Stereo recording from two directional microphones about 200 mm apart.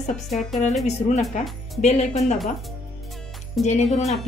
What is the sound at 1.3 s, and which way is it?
Speech, 35° left (ahead or behind).